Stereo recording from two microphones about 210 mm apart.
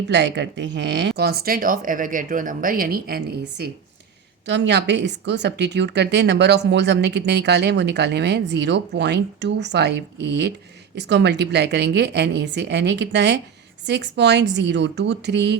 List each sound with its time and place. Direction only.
0.1 s speech: 55° right (ahead or behind)
4.4 s a woman's voice: 55° right (ahead or behind)